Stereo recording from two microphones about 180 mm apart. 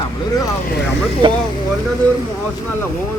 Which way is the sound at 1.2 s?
30° right (ahead or behind).